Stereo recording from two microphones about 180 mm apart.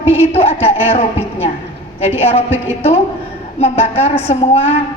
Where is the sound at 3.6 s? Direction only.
35° left (ahead or behind).